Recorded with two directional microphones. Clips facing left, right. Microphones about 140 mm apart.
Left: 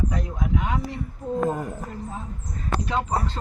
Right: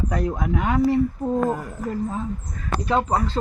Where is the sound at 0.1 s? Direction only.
65° right (ahead or behind).